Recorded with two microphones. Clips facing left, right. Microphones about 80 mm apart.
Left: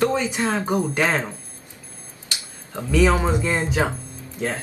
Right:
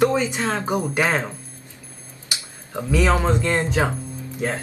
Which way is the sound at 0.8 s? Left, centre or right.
Right.